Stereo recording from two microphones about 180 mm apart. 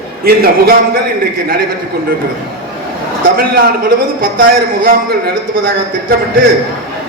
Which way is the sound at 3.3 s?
55° right (ahead or behind).